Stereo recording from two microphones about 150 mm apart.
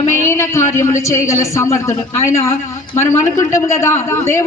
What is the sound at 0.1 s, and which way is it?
A man's voice, 20° left (ahead or behind).